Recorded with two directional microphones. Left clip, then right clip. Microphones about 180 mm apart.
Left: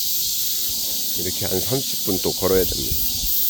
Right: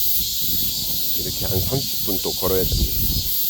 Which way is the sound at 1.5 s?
45° left (ahead or behind).